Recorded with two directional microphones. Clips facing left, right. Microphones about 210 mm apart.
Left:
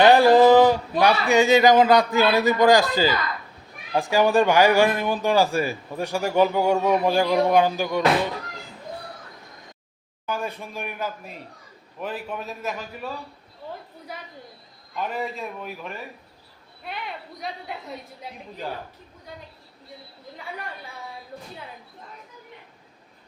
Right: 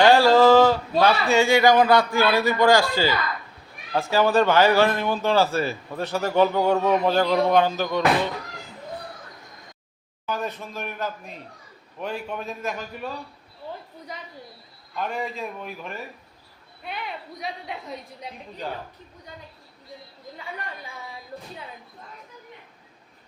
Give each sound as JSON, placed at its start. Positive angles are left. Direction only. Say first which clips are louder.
{"t": 0.0, "sound": "a sound", "louder": "left 1 dB", "side_deg": 20}
{"t": 1.3, "sound": "a man's voice", "louder": "left 3 dB", "side_deg": 20}
{"t": 10.2, "sound": "a man's voice", "louder": "even", "side_deg": 10}
{"t": 14.9, "sound": "a man's voice", "louder": "even", "side_deg": 5}